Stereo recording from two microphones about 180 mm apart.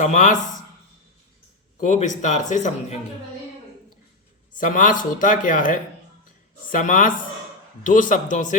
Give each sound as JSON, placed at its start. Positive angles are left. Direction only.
{"t": 0.0, "sound": "speech", "side_deg": 45}
{"t": 1.8, "sound": "speech", "side_deg": 40}
{"t": 4.5, "sound": "speech", "side_deg": 45}